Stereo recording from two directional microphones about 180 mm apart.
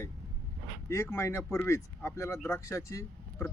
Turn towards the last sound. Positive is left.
turn(degrees=15)  # may be behind; listen again after turning